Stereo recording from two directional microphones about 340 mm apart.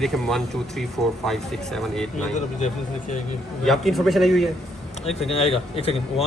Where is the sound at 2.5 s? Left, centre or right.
Left.